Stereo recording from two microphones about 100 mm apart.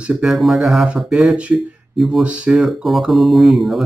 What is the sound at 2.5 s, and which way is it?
Speech, centre (ahead or behind).